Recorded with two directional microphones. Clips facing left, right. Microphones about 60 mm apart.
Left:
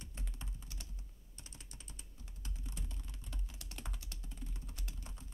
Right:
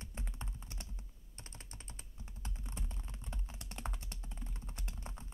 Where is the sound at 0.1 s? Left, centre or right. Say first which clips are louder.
Right 4 dB; right.